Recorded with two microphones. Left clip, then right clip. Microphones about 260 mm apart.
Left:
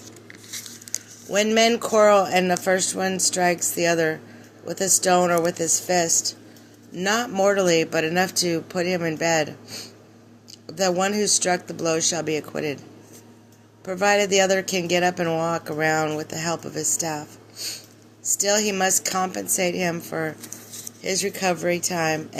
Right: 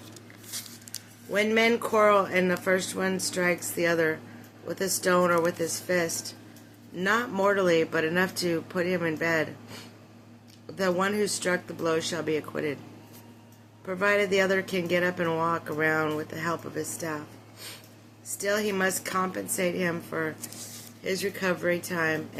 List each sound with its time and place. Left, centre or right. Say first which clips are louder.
1.3 s speech: left 5 dB; left
13.8 s speech: left 5 dB; centre